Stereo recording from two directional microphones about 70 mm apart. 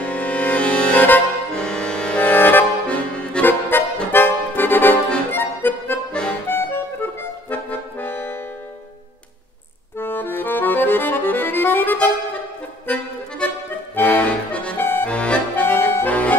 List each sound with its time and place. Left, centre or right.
0.0 s music: centre
1.5 s accordion: centre; by 8.4 s left
9.9 s accordion: left
12.8 s music: centre
13.9 s accordion: left